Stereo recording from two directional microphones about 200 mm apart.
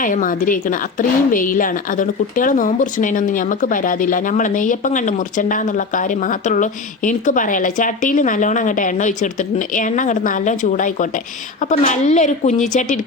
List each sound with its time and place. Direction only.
0.0 s speech: 40° left (ahead or behind)